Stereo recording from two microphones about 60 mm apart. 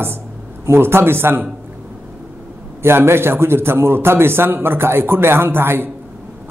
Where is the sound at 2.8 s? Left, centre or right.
Right.